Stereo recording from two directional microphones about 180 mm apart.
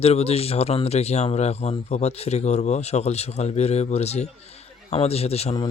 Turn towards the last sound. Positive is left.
turn(degrees=35)  # may be behind; listen again after turning